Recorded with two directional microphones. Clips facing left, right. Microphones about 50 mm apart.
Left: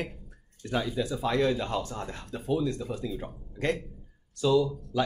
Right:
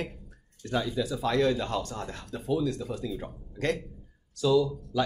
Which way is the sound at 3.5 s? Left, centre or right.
Centre.